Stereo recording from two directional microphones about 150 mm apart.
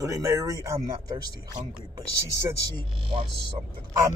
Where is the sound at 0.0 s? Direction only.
20° right (ahead or behind).